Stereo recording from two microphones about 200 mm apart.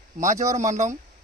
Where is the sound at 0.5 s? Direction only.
35° right (ahead or behind).